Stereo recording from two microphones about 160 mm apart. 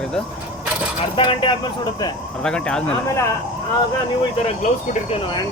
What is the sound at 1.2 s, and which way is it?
Speech, 30° left (ahead or behind).